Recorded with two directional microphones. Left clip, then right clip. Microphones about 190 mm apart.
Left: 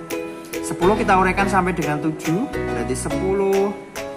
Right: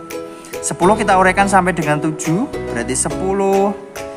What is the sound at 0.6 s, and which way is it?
Speech, 35° right (ahead or behind).